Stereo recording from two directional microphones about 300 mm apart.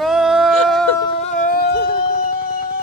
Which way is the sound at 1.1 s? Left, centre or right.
Left.